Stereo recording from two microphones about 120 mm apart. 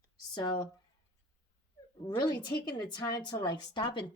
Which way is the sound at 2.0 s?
40° left (ahead or behind).